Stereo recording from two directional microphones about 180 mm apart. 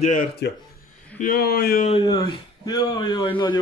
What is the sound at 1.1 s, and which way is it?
Speech, 50° left (ahead or behind).